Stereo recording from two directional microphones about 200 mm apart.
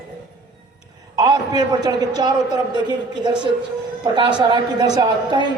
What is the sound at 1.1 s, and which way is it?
A man's voice, 20° right (ahead or behind).